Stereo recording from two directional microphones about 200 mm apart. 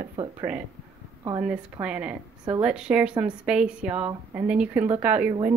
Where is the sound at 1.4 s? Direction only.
5° right (ahead or behind).